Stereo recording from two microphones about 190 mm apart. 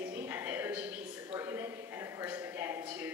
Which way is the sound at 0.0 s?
10° right (ahead or behind).